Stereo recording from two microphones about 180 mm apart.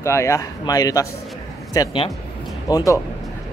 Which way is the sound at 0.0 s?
15° left (ahead or behind).